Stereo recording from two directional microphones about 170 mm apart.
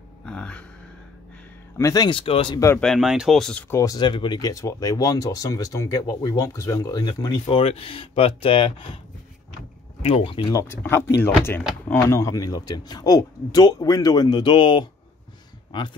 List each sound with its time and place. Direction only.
0.2 s a sound: 5° left (ahead or behind)
1.8 s speech: 20° left (ahead or behind)
2.8 s speech: centre (ahead or behind)
3.7 s speech: 20° left (ahead or behind)
10.0 s speech: 30° left (ahead or behind)
10.6 s speech: 15° left (ahead or behind)